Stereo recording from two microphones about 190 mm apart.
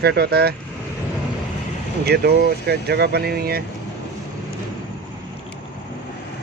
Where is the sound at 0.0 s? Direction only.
60° right (ahead or behind).